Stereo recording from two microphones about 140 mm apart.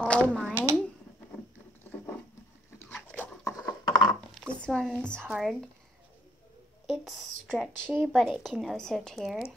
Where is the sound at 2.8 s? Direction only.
15° left (ahead or behind).